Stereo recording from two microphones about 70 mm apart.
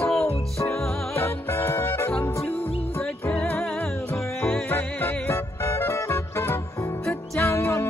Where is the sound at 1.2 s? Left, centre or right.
Left.